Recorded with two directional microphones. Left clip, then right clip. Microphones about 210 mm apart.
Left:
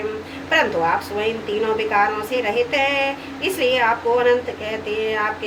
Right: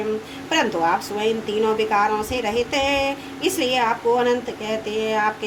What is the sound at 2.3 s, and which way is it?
A woman's voice, 55° right (ahead or behind).